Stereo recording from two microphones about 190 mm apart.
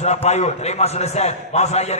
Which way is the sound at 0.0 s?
35° left (ahead or behind).